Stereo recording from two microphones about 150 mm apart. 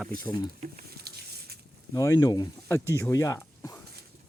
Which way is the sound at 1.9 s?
20° left (ahead or behind).